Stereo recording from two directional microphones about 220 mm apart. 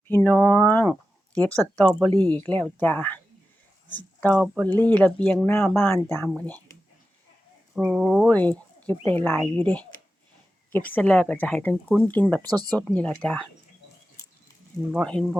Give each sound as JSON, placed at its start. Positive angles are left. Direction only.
{"t": 0.1, "sound": "speech", "side_deg": 10}
{"t": 7.8, "sound": "speech", "side_deg": -5}
{"t": 12.5, "sound": "speech", "side_deg": -20}
{"t": 12.7, "sound": "speech", "side_deg": 5}